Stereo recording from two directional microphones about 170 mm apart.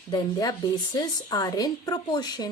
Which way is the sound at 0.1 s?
25° left (ahead or behind).